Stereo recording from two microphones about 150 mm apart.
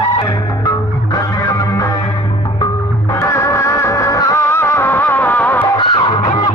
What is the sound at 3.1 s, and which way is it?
Music, 20° left (ahead or behind).